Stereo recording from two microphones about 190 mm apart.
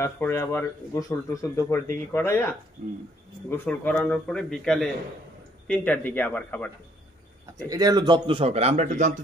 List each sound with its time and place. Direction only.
0.0 s a man's voice: 15° left (ahead or behind)
7.7 s speech: 20° right (ahead or behind); by 9.1 s 40° right (ahead or behind)